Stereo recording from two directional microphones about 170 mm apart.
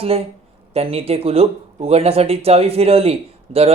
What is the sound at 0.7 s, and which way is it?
Speech, 35° right (ahead or behind).